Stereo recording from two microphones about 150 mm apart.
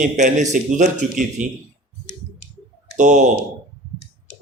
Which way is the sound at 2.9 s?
55° right (ahead or behind).